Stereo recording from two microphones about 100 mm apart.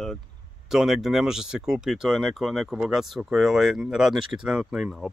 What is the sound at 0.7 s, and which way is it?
Speech, centre (ahead or behind).